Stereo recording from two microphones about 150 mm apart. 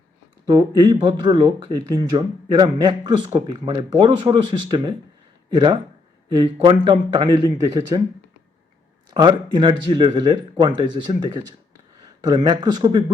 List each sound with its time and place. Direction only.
0.4 s speech: 30° right (ahead or behind)
9.0 s speech: 30° right (ahead or behind)